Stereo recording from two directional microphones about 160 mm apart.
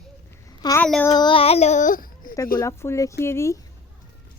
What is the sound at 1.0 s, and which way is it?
Speech, 25° left (ahead or behind).